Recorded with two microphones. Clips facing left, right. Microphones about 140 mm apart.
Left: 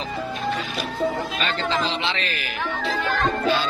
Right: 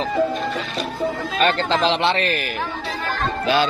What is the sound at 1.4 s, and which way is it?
A man's voice, 65° right (ahead or behind).